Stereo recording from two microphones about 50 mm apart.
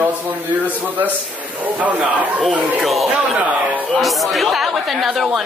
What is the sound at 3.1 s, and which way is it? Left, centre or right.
Speech, right.